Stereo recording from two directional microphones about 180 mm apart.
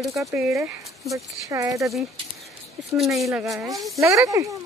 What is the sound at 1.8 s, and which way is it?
Speech, centre (ahead or behind).